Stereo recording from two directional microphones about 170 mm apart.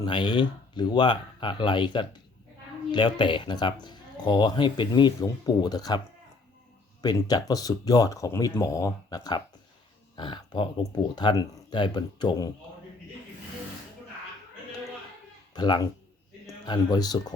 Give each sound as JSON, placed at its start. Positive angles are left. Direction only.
{"t": 0.0, "sound": "speech", "side_deg": 25}
{"t": 7.0, "sound": "speech", "side_deg": 25}
{"t": 15.5, "sound": "speech", "side_deg": 25}